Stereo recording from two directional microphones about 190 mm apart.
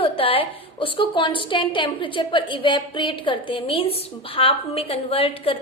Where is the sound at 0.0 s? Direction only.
30° left (ahead or behind).